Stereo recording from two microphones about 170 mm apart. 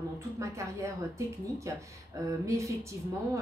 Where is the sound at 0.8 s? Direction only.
15° right (ahead or behind).